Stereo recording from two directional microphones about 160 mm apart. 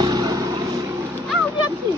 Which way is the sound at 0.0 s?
25° right (ahead or behind).